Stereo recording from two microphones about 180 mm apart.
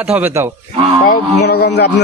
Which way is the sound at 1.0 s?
55° left (ahead or behind).